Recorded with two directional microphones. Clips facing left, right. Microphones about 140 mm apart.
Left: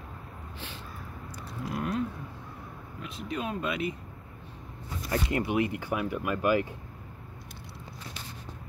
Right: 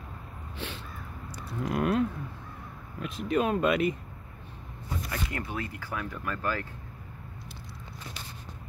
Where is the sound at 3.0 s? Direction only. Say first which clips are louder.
Right 7 dB; 55° right (ahead or behind).